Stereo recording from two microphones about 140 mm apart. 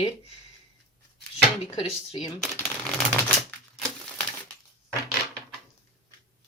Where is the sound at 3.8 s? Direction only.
5° left (ahead or behind).